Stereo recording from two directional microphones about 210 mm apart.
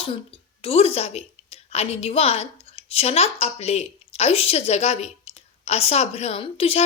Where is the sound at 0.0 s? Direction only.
25° left (ahead or behind).